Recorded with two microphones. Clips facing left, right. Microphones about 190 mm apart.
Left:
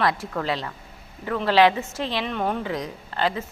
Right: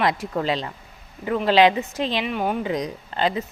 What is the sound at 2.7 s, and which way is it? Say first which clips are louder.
Speech: right 3 dB; 20° right (ahead or behind).